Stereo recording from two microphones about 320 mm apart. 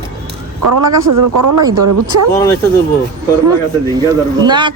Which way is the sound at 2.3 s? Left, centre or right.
Centre.